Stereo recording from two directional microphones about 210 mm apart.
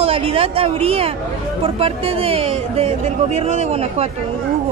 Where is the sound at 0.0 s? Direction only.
25° right (ahead or behind).